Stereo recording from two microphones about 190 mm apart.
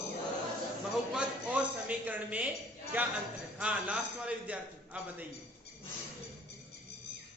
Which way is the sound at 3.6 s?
5° right (ahead or behind).